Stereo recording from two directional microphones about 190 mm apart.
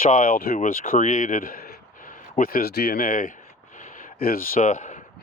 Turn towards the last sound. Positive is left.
turn(degrees=40)  # may be behind; listen again after turning